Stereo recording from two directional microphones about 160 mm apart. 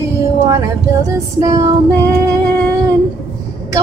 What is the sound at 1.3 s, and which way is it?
Music, 20° right (ahead or behind).